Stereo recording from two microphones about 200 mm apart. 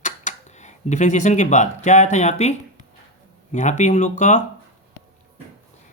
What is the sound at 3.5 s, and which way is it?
Speech, 35° left (ahead or behind).